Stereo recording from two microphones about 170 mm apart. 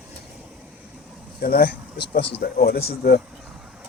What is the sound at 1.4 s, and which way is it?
Speech, 65° left (ahead or behind).